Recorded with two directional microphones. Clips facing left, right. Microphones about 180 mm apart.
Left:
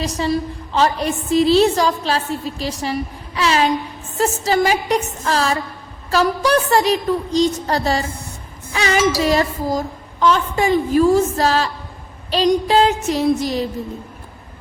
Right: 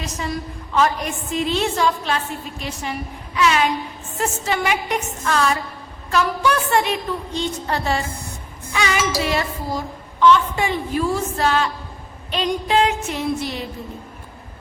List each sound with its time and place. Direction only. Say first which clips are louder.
0.0 s a woman's voice: left 7 dB; 30° left (ahead or behind)